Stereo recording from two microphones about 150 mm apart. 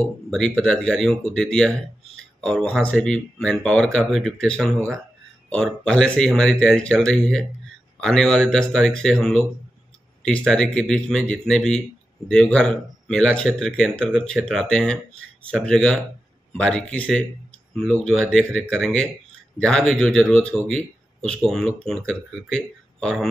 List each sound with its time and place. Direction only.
0.0 s speech: 5° left (ahead or behind)
4.7 s speech: 20° right (ahead or behind)
5.5 s speech: 5° left (ahead or behind)